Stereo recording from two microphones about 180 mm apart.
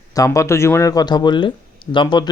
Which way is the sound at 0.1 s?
20° left (ahead or behind).